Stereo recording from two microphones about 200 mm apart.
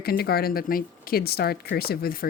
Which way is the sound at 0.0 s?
50° left (ahead or behind).